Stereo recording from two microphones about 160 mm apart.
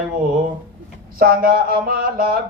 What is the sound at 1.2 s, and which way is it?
Speech, 65° right (ahead or behind).